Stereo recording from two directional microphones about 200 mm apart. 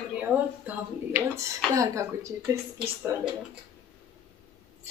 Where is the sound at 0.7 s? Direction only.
10° right (ahead or behind).